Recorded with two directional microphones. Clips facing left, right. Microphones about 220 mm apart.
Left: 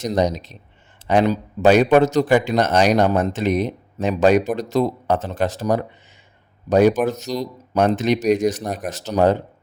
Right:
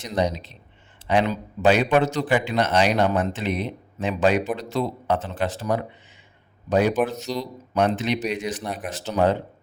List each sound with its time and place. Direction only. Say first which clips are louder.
0.0 s speech: left 5 dB; 40° left (ahead or behind)